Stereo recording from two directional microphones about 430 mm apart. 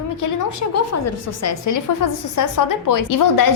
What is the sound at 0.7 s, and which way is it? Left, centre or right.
A woman's voice, left.